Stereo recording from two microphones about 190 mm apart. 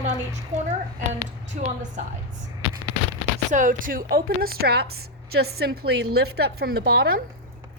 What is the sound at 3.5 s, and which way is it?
A woman's voice, 45° right (ahead or behind).